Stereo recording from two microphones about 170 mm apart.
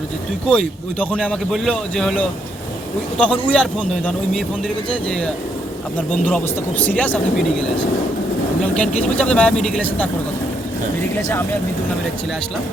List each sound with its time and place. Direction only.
0.4 s a man's voice: 5° left (ahead or behind)
4.9 s a man's voice: 5° left (ahead or behind)
8.7 s speech: 5° left (ahead or behind)
11.2 s speech: 15° left (ahead or behind)